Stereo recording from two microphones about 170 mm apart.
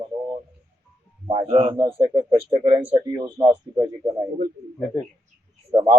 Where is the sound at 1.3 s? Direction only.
35° right (ahead or behind).